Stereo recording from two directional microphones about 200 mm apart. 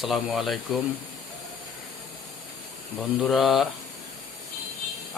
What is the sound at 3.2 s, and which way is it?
Speech, centre (ahead or behind).